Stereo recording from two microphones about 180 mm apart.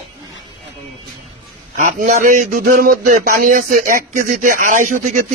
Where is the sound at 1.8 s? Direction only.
45° right (ahead or behind).